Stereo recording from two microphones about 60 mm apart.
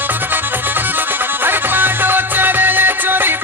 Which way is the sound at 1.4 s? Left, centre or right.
Right.